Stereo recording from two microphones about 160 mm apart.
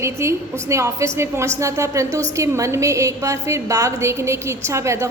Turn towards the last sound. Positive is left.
turn(degrees=-15)  # may be behind; listen again after turning